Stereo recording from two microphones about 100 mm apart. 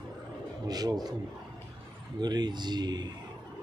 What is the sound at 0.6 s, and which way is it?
Speech, 40° right (ahead or behind).